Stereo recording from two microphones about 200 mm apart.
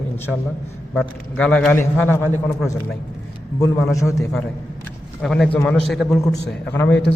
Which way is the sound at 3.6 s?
20° left (ahead or behind).